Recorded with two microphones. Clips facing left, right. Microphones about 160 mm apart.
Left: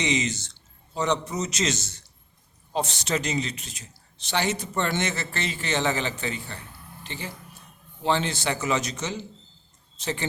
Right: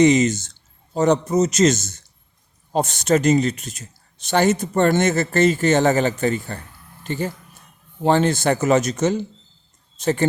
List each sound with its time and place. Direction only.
0.0 s speech: 45° right (ahead or behind)